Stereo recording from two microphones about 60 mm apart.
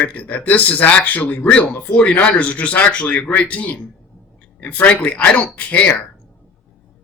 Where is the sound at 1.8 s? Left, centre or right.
Centre.